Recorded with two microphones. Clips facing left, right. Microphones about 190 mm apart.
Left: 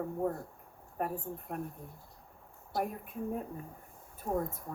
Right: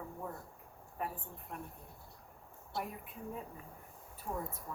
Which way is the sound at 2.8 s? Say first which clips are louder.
Left 8 dB; 50° left (ahead or behind).